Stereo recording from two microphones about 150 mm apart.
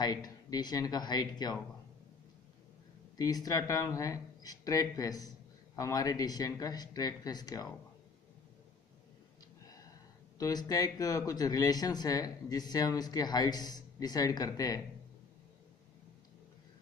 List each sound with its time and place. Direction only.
0.0 s speech: 25° left (ahead or behind)
3.2 s speech: 25° left (ahead or behind)
10.4 s speech: 25° left (ahead or behind)